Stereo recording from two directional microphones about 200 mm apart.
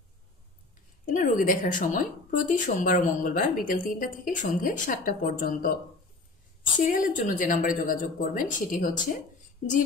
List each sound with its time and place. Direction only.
1.0 s a woman's voice: 40° left (ahead or behind)
6.9 s a woman's voice: 40° left (ahead or behind)